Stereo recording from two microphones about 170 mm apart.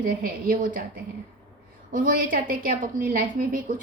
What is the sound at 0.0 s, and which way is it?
Speech, 55° right (ahead or behind).